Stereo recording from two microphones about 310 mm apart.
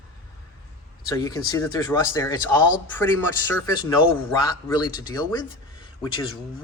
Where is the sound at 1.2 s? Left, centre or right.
Centre.